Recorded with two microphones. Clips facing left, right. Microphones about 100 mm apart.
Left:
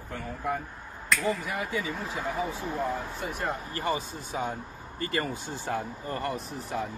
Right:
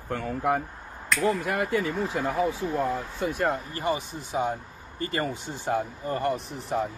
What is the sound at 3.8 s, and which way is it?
Speech, 20° right (ahead or behind).